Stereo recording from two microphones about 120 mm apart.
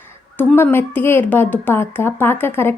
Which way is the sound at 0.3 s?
20° left (ahead or behind).